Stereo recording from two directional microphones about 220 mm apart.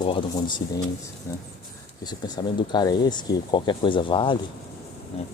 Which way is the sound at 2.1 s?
20° left (ahead or behind).